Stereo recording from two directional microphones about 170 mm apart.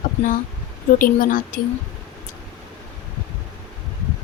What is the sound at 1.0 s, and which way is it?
Speech, 50° left (ahead or behind).